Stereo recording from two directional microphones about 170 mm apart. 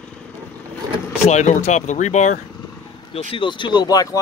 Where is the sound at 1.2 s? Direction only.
45° left (ahead or behind).